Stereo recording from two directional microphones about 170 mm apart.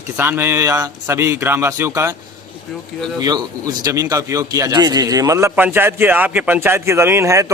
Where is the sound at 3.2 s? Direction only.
20° right (ahead or behind).